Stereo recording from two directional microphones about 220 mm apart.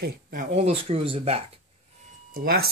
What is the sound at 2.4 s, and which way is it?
Speech, 45° right (ahead or behind).